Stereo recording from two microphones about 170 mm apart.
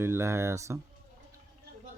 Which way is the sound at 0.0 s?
15° right (ahead or behind).